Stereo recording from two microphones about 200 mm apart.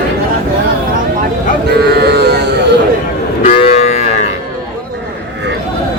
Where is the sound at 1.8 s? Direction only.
55° right (ahead or behind).